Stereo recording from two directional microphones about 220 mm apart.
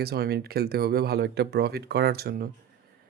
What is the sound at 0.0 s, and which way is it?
Speech, 45° right (ahead or behind).